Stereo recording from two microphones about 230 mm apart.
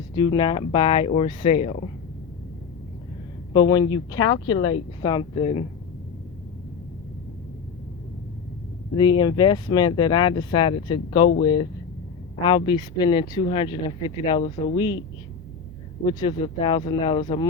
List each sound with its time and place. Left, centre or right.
0.2 s speech: centre
3.5 s speech: centre
9.0 s speech: centre
16.0 s speech: left